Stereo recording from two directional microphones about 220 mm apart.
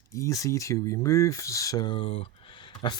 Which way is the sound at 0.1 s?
15° left (ahead or behind).